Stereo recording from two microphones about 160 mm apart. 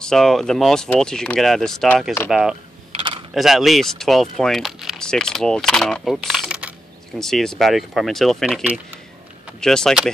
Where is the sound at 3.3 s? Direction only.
Centre (ahead or behind).